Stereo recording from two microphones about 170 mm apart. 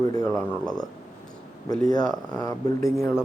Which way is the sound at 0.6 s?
25° left (ahead or behind).